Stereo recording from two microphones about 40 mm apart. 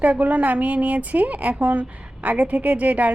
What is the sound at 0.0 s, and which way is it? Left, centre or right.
Speech, right.